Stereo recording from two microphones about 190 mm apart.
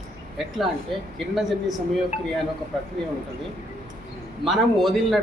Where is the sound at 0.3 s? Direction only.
Centre (ahead or behind).